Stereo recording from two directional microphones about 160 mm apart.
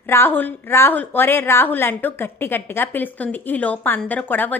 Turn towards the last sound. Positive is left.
turn(degrees=10)  # may be behind; listen again after turning